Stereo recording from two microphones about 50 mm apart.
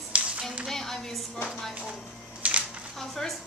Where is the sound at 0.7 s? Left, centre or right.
Centre.